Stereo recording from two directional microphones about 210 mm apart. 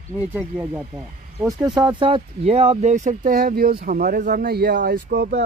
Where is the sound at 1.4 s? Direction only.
20° right (ahead or behind).